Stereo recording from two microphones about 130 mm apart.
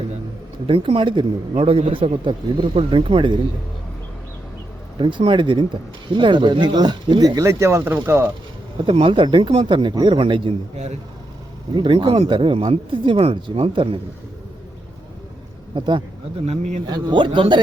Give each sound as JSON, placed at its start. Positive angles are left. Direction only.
{"t": 0.7, "sound": "a man's voice", "side_deg": -45}
{"t": 4.9, "sound": "speech", "side_deg": -40}
{"t": 8.8, "sound": "speech", "side_deg": -40}
{"t": 11.7, "sound": "speech", "side_deg": -40}
{"t": 15.7, "sound": "speech", "side_deg": -40}
{"t": 16.5, "sound": "speech", "side_deg": -60}
{"t": 16.8, "sound": "speech", "side_deg": -35}